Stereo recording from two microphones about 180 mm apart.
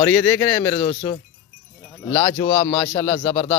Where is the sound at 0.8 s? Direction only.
30° left (ahead or behind).